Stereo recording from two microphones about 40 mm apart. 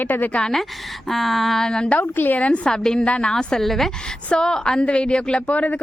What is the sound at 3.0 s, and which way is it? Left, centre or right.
Speech, left.